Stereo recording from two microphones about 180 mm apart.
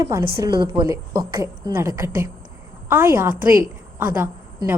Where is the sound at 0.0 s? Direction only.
15° right (ahead or behind).